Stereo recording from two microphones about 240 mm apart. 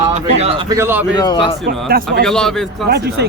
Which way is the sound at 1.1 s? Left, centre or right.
Centre.